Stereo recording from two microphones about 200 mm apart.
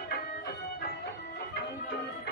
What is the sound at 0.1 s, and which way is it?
Music, 50° left (ahead or behind).